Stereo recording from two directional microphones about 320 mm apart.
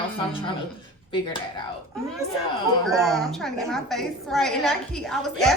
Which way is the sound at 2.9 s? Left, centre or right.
Centre.